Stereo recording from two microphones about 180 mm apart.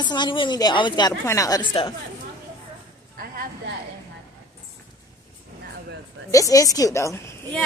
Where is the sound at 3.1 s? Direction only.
55° right (ahead or behind).